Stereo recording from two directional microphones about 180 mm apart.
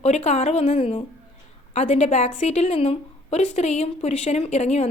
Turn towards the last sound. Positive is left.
turn(degrees=35)  # may be behind; listen again after turning